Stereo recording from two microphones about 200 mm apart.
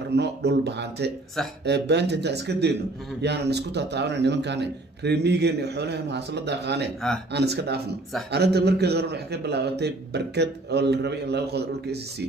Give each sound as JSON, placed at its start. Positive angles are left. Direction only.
{"t": 0.1, "sound": "a man's voice", "side_deg": -60}